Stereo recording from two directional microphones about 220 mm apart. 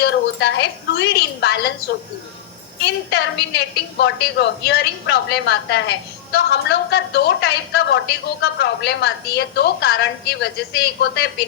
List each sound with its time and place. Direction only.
0.0 s a woman's voice: 55° left (ahead or behind)
2.8 s a woman's voice: 50° left (ahead or behind)
11.0 s a woman's voice: 50° left (ahead or behind)